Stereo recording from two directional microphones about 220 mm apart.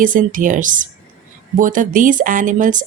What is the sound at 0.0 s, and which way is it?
Speech, 35° right (ahead or behind).